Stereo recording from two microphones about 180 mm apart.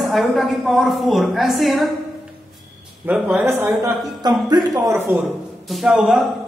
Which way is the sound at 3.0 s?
5° right (ahead or behind).